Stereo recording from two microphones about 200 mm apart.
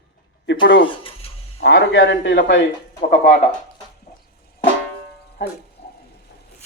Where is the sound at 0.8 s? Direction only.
25° left (ahead or behind).